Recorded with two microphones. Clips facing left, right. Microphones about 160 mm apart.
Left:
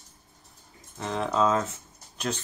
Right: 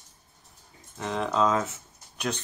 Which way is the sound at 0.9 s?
Centre (ahead or behind).